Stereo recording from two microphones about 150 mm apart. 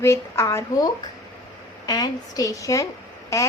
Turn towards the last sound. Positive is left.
turn(degrees=20)  # may be behind; listen again after turning